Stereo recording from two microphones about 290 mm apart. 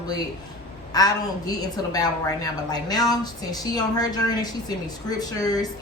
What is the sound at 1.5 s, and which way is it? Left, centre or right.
A woman's voice, centre.